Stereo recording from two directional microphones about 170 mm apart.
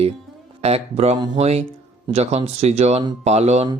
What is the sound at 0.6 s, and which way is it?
Speech, 35° right (ahead or behind).